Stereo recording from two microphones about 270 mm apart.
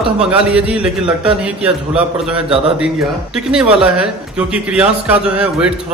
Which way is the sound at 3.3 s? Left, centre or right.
Centre.